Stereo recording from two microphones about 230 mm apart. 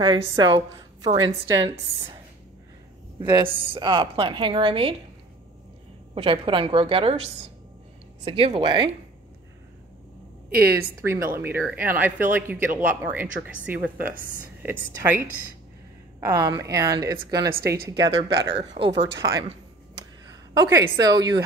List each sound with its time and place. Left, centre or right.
0.0 s a woman's voice: right
3.2 s a woman's voice: right
6.1 s a woman's voice: right
10.5 s speech: right
11.3 s speech: centre
16.2 s speech: centre
18.3 s speech: right
19.1 s a woman's voice: centre